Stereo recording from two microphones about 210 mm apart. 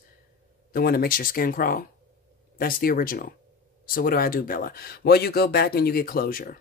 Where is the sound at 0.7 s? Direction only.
45° left (ahead or behind).